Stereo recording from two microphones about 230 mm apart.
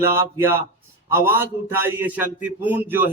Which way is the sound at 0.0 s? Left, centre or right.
Centre.